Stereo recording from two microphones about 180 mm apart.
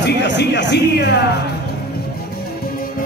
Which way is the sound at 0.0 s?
75° left (ahead or behind).